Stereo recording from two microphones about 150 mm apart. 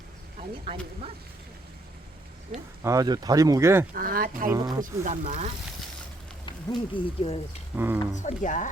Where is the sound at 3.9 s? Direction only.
70° right (ahead or behind).